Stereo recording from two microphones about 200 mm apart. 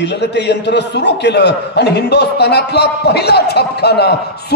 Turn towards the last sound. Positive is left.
turn(degrees=55)  # may be behind; listen again after turning